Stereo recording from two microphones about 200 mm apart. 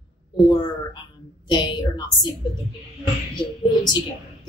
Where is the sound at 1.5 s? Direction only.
20° left (ahead or behind).